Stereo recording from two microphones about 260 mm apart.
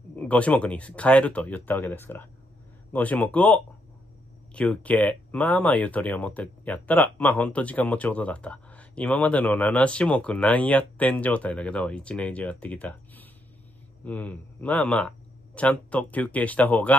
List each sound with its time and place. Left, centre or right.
0.1 s speech: centre